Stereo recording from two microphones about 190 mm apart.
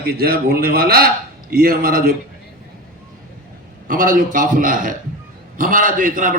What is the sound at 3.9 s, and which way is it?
A man's voice, 45° right (ahead or behind).